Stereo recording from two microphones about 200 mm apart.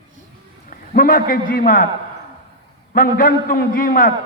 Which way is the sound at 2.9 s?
45° left (ahead or behind).